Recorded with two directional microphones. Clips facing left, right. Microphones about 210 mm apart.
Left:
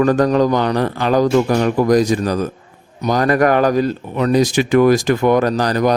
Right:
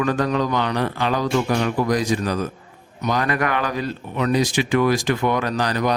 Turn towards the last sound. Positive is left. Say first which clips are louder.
# left 6 dB
turn(degrees=40)  # may be behind; listen again after turning